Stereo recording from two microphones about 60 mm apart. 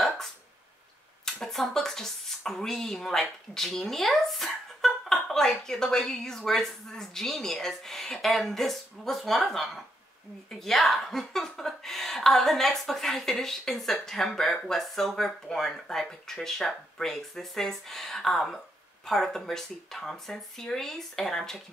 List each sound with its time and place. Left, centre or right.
1.2 s speech: centre